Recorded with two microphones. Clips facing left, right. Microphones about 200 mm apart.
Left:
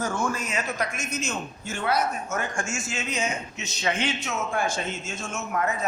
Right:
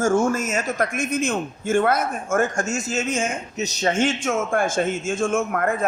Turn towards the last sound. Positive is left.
turn(degrees=-55)  # may be behind; listen again after turning